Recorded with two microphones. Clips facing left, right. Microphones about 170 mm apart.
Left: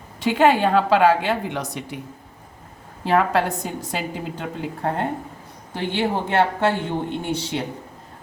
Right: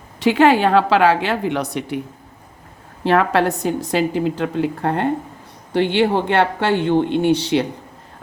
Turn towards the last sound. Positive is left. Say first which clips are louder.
# right 9 dB
turn(degrees=-75)  # may be behind; listen again after turning